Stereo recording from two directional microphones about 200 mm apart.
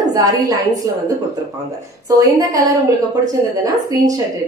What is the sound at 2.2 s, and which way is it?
Speech, 15° right (ahead or behind).